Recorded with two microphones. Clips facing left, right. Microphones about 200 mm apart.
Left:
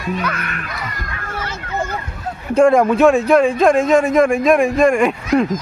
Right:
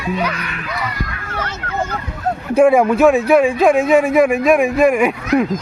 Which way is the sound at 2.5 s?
5° right (ahead or behind).